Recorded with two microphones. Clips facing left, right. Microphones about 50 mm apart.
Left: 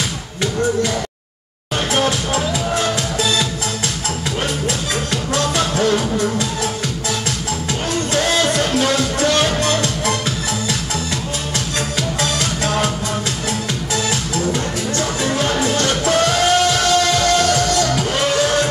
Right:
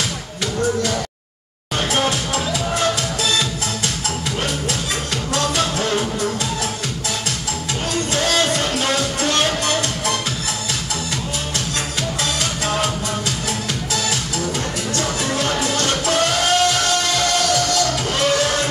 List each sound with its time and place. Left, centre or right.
2.3 s music: left
5.3 s music: left
8.1 s music: left
9.4 s music: left
15.0 s music: left